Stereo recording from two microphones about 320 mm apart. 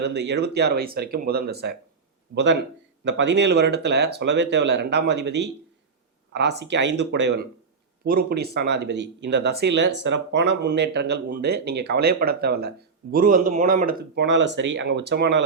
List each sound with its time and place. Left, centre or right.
0.0 s speech: right